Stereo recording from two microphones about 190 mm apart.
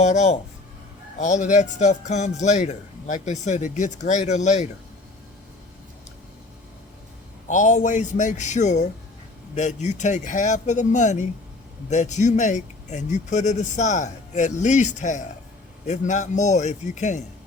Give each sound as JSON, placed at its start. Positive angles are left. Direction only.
{"t": 0.0, "sound": "speech", "side_deg": 35}
{"t": 7.4, "sound": "speech", "side_deg": 40}